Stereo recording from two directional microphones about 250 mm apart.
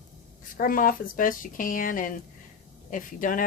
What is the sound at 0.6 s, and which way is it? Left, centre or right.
Speech, left.